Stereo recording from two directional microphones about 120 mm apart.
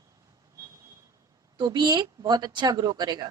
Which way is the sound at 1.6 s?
35° right (ahead or behind).